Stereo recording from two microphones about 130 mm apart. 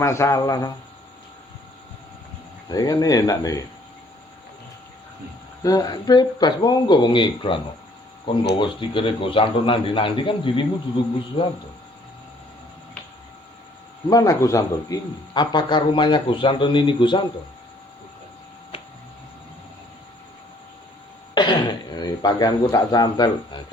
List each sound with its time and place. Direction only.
0.0 s speech: 20° left (ahead or behind)
2.6 s speech: 30° left (ahead or behind)
5.6 s a man's voice: 30° left (ahead or behind)
14.1 s a man's voice: 30° left (ahead or behind)
21.3 s throat clearing: 35° left (ahead or behind)